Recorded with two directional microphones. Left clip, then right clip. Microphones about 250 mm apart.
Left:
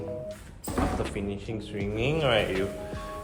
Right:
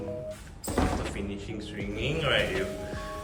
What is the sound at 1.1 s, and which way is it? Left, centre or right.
Speech, centre.